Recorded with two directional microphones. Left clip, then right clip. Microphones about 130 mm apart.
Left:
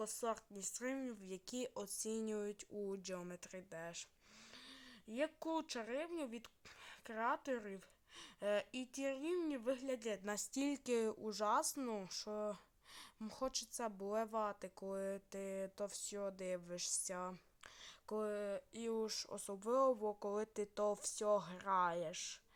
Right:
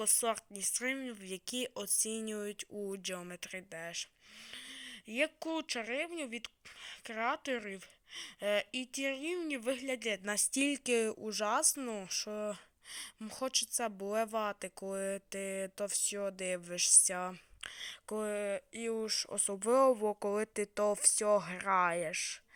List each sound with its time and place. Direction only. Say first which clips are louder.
0.0 s speech: right 8 dB; 20° right (ahead or behind); by 4.1 s 5° right (ahead or behind)
4.7 s a sound: right 9 dB; 15° right (ahead or behind)
5.4 s speech: right 5 dB; 5° right (ahead or behind)
11.8 s speech: right 4 dB; centre (ahead or behind)
12.0 s speech: right 6 dB; 10° right (ahead or behind)